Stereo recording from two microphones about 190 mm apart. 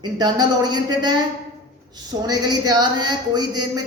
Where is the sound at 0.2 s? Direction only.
20° right (ahead or behind).